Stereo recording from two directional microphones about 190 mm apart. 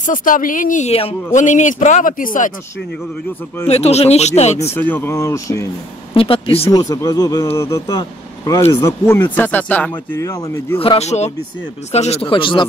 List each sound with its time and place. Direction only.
0.0 s speech: 45° left (ahead or behind)
3.6 s speech: 35° left (ahead or behind)
4.7 s speech: 10° left (ahead or behind)
6.1 s speech: 30° left (ahead or behind); by 10.8 s 15° left (ahead or behind)
10.8 s speech: 30° left (ahead or behind)